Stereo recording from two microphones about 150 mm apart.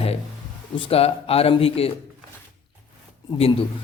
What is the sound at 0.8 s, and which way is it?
Speech, 40° left (ahead or behind).